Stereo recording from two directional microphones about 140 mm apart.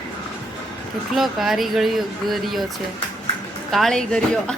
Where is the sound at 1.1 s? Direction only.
Centre (ahead or behind).